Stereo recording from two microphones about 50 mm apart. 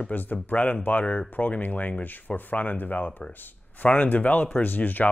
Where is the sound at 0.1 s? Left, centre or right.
Left.